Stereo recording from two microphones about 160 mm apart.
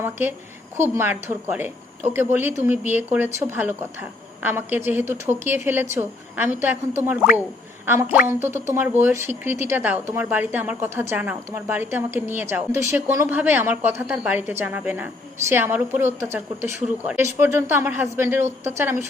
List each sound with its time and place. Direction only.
0.0 s a woman's voice: 10° right (ahead or behind)